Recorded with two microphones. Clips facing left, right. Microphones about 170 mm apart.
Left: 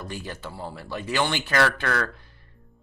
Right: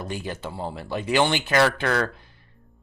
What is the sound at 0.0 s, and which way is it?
Speech, 20° right (ahead or behind).